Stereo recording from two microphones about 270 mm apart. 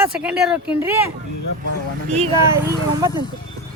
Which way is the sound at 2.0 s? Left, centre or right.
Right.